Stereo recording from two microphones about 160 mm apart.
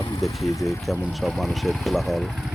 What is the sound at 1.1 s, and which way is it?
Speech, centre (ahead or behind).